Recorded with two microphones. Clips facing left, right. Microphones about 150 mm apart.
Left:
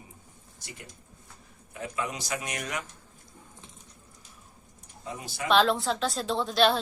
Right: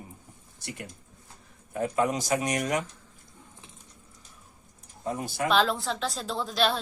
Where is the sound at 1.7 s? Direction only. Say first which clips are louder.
Right 8 dB; 45° right (ahead or behind).